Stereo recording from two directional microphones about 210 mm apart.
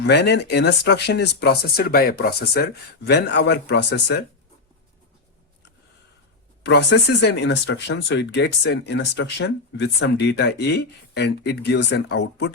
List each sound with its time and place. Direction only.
0.0 s speech: 55° left (ahead or behind)
6.6 s speech: 55° left (ahead or behind)